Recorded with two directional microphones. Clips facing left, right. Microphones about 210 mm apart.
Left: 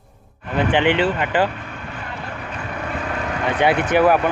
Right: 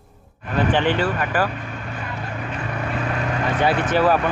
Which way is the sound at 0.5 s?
20° left (ahead or behind).